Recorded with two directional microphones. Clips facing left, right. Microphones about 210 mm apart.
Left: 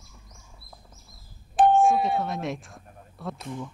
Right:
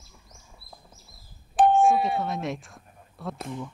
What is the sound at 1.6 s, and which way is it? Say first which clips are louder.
Doorbell: even; centre (ahead or behind).